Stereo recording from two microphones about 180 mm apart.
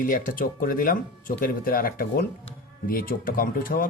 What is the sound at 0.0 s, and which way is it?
Speech, 50° left (ahead or behind).